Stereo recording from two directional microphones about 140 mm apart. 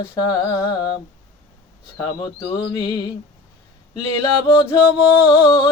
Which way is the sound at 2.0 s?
30° left (ahead or behind).